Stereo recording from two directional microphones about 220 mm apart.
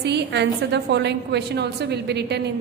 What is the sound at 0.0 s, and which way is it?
A woman's voice, 50° right (ahead or behind).